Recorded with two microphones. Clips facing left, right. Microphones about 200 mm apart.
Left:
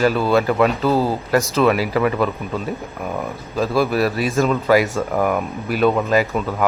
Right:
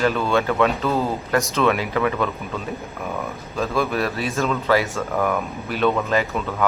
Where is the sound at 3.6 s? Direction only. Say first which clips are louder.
Left 4 dB; 35° left (ahead or behind).